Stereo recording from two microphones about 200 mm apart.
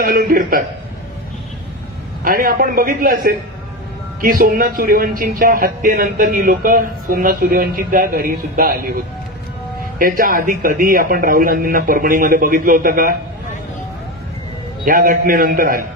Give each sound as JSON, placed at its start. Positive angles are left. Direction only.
{"t": 0.0, "sound": "a man's voice", "side_deg": -45}
{"t": 2.2, "sound": "a man's voice", "side_deg": -45}
{"t": 9.9, "sound": "a man's voice", "side_deg": -45}
{"t": 14.9, "sound": "a man's voice", "side_deg": -45}